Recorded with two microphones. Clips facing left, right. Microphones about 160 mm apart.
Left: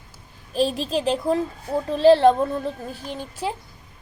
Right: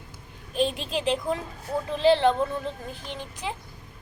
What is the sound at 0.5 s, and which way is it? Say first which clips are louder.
Speech: left 4 dB; 35° left (ahead or behind).